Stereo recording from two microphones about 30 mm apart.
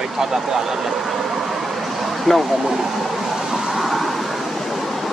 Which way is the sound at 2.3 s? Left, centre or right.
Centre.